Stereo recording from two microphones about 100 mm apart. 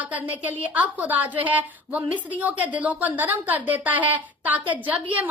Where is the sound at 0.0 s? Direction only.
15° right (ahead or behind).